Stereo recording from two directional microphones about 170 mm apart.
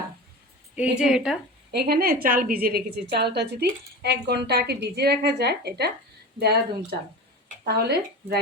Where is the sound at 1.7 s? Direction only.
70° right (ahead or behind).